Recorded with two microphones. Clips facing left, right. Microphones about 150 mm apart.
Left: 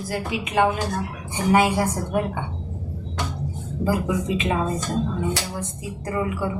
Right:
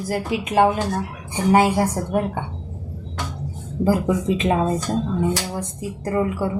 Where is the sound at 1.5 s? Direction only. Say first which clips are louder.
Right 2 dB; 30° right (ahead or behind).